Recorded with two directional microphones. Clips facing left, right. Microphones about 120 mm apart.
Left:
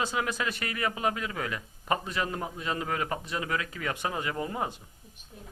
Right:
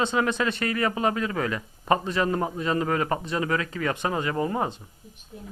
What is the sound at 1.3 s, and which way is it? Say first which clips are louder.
A man's voice: right 6 dB; 65° right (ahead or behind).